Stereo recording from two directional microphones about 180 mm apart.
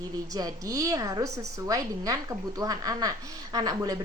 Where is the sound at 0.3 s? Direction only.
20° right (ahead or behind).